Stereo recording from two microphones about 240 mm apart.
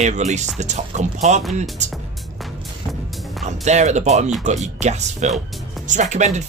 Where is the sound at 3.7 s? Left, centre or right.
Right.